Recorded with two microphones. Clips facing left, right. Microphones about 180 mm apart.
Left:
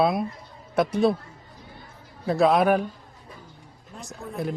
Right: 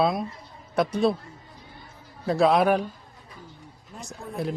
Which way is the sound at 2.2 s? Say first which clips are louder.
Even; centre (ahead or behind).